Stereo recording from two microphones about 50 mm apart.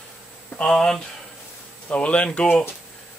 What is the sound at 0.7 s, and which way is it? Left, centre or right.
Speech, centre.